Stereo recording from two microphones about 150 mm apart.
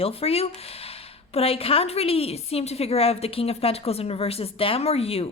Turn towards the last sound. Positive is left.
turn(degrees=40)  # may be behind; listen again after turning